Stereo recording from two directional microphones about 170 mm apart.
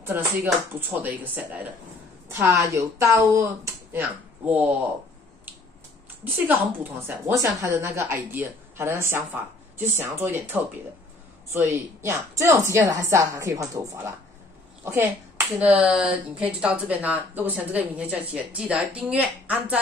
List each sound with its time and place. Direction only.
0.0 s a woman's voice: 15° right (ahead or behind)
6.3 s a woman's voice: 10° right (ahead or behind)